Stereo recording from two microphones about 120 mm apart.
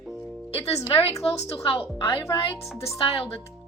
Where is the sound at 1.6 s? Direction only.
55° left (ahead or behind).